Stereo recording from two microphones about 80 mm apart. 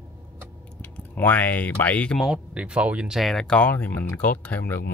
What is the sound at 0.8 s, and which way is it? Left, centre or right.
Speech, left.